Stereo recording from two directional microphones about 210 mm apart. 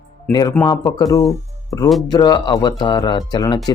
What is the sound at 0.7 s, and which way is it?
Speech, 20° left (ahead or behind).